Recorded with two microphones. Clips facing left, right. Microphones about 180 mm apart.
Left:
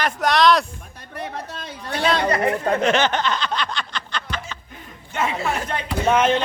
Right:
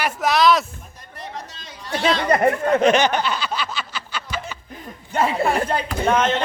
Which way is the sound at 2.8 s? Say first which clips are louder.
Right 2 dB; 15° right (ahead or behind).